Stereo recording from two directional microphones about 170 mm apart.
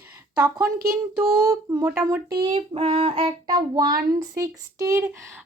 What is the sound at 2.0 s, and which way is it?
Child singing, 20° right (ahead or behind).